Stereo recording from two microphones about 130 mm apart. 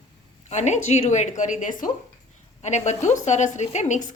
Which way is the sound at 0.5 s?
60° left (ahead or behind).